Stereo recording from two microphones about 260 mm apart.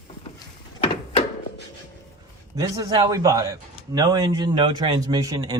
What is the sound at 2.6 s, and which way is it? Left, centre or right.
A man's voice, centre.